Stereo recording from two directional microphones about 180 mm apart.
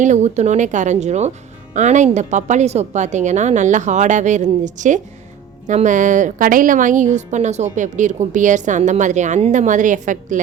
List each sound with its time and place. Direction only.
0.0 s a woman's voice: 40° right (ahead or behind)